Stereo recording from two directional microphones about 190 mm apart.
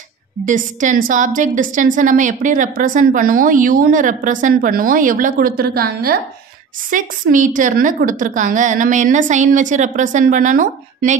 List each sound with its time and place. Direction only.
0.5 s a woman's voice: 40° right (ahead or behind)